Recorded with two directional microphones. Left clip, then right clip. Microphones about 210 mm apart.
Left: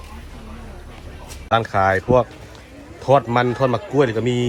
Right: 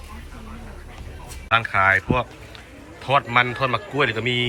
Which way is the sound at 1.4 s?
20° left (ahead or behind).